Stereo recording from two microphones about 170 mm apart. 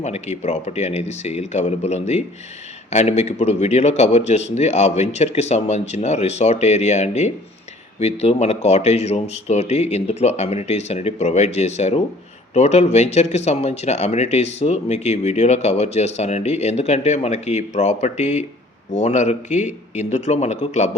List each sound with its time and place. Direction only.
0.0 s speech: 40° left (ahead or behind)